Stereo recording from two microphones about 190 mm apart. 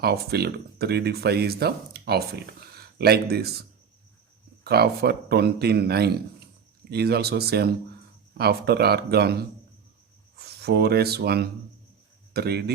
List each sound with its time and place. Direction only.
0.0 s speech: 55° right (ahead or behind)